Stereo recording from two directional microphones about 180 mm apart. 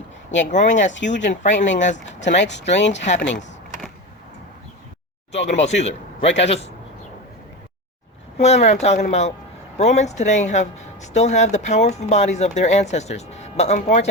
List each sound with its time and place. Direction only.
0.3 s speech: 40° left (ahead or behind)
2.4 s speech: 75° left (ahead or behind)
2.9 s speech: 40° left (ahead or behind)
5.3 s speech: 35° left (ahead or behind)
8.4 s speech: 35° left (ahead or behind)